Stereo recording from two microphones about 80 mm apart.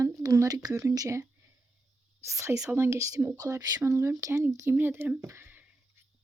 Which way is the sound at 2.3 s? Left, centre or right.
Right.